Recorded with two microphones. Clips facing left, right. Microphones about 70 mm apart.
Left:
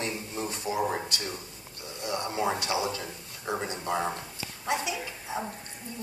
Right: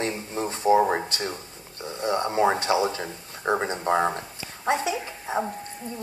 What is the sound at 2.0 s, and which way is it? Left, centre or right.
Speech, right.